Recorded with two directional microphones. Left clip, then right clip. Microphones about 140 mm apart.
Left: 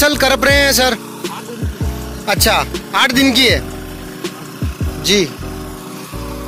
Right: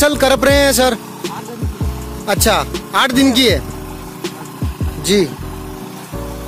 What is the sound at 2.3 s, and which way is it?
Music, 20° right (ahead or behind).